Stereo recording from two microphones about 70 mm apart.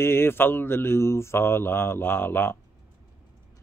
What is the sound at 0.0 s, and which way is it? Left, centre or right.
Speech, left.